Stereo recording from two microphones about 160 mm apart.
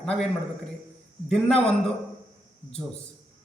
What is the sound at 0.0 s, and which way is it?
Speech, centre (ahead or behind).